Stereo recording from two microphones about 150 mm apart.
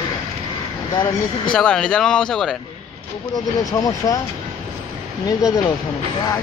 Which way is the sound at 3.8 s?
25° left (ahead or behind).